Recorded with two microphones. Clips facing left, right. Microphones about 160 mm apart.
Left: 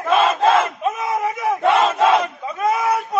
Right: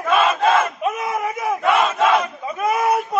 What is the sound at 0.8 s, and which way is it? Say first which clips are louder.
Battle cry: left 1 dB; centre (ahead or behind).